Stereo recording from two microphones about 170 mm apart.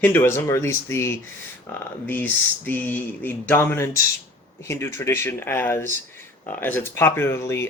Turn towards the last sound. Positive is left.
turn(degrees=15)  # may be behind; listen again after turning